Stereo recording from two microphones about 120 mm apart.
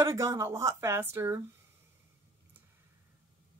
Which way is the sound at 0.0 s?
25° right (ahead or behind).